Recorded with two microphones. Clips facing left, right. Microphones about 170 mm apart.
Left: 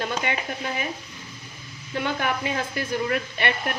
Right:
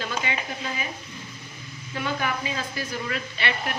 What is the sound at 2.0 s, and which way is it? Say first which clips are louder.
A woman's voice: left 2 dB; 60° left (ahead or behind).